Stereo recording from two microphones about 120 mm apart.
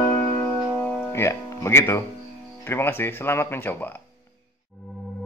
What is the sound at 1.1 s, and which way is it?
Music, 20° left (ahead or behind).